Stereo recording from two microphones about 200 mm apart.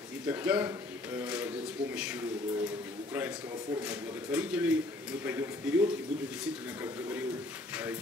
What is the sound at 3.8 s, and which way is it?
A man's voice, 10° right (ahead or behind).